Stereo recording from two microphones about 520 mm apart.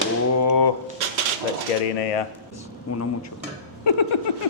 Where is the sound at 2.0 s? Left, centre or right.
Left.